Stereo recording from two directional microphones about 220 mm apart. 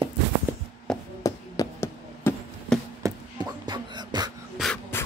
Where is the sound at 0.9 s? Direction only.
Centre (ahead or behind).